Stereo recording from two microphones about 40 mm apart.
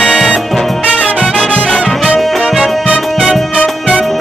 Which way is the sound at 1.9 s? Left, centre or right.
Centre.